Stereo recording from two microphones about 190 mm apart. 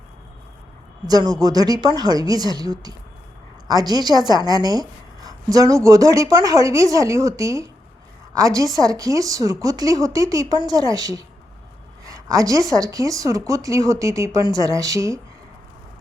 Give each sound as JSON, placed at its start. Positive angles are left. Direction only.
{"t": 1.0, "sound": "a woman's voice", "side_deg": -20}
{"t": 12.0, "sound": "a sound", "side_deg": -20}
{"t": 12.7, "sound": "speech", "side_deg": -20}